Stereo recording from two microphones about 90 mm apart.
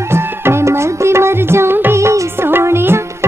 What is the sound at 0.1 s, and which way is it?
Music, 30° right (ahead or behind).